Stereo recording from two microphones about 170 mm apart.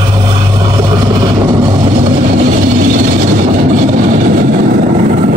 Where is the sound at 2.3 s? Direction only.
50° right (ahead or behind).